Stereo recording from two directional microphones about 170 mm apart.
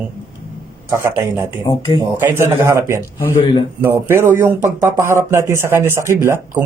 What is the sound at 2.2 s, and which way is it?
Speech, 15° right (ahead or behind).